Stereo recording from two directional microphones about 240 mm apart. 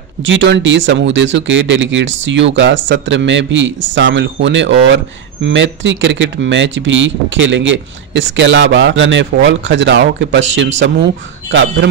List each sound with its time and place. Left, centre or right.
0.2 s speech: right